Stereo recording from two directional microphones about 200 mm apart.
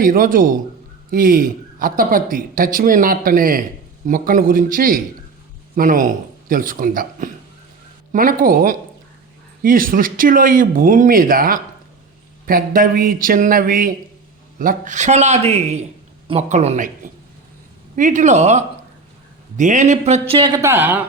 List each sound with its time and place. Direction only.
0.0 s a man's voice: 45° right (ahead or behind)
17.9 s a man's voice: 40° right (ahead or behind); by 21.0 s 10° right (ahead or behind)